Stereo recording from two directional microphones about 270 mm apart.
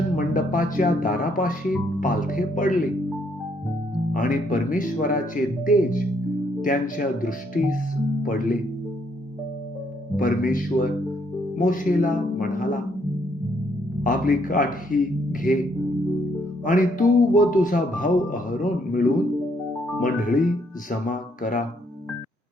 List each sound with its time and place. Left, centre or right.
0.2 s speech: left
4.1 s speech: left
10.2 s speech: left
14.0 s speech: left
16.6 s speech: left